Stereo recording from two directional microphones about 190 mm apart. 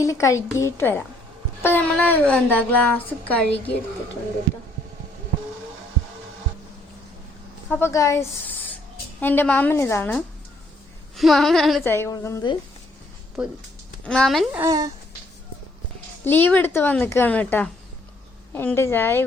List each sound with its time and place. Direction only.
0.0 s a woman's voice: 15° left (ahead or behind)
7.7 s a woman's voice: 15° left (ahead or behind)
11.2 s female singing: centre (ahead or behind)
11.8 s a woman's voice: 10° left (ahead or behind)
13.4 s female singing: 5° right (ahead or behind)
14.5 s speech: 15° right (ahead or behind)
16.2 s a woman's voice: 10° left (ahead or behind)